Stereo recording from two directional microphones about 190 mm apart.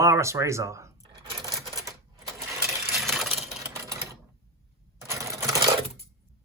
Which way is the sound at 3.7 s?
15° right (ahead or behind).